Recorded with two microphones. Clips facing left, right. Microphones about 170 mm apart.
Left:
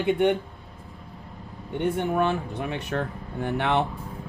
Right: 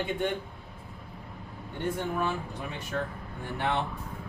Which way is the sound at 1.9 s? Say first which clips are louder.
Left 6 dB; 70° left (ahead or behind).